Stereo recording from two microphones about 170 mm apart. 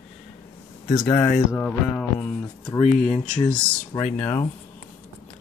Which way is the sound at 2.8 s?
40° left (ahead or behind).